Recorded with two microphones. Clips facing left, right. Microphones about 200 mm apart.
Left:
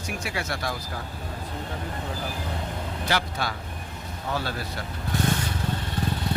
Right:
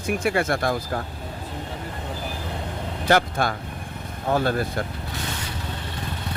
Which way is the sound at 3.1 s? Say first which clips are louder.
Right 8 dB; 50° right (ahead or behind).